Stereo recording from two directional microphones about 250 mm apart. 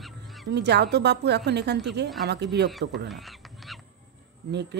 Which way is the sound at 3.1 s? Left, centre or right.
Centre.